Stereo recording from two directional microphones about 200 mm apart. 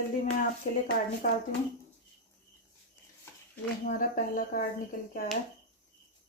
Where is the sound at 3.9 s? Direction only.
45° left (ahead or behind).